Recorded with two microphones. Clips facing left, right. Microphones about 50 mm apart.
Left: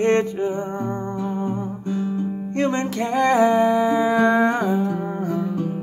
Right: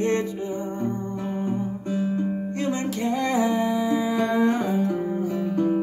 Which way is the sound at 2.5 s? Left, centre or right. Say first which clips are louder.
Left 4 dB; left.